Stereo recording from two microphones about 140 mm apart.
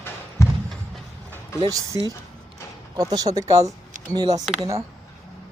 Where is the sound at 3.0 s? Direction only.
25° right (ahead or behind).